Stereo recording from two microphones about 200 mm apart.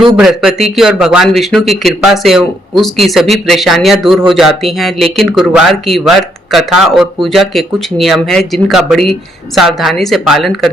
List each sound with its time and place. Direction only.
0.2 s speech: centre (ahead or behind)